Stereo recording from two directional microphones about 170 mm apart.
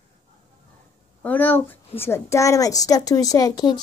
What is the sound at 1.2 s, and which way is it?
A woman's voice, 10° left (ahead or behind).